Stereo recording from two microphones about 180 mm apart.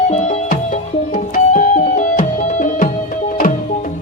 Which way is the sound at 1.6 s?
40° left (ahead or behind).